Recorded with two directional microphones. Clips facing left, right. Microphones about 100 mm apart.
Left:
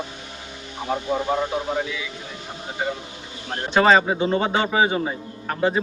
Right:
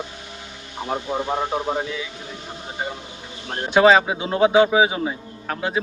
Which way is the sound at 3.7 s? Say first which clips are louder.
Right 2 dB; 5° right (ahead or behind).